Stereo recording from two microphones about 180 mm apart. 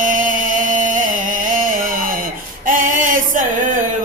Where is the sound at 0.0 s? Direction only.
45° right (ahead or behind).